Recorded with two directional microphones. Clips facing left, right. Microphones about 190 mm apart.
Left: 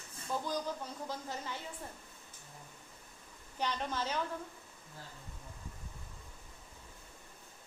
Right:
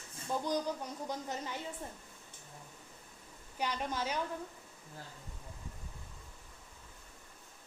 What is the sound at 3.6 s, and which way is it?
Speech, 10° right (ahead or behind).